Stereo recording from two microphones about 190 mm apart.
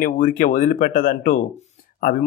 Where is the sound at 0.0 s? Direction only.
45° left (ahead or behind).